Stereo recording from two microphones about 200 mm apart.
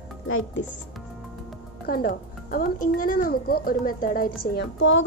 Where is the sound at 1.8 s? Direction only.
45° left (ahead or behind).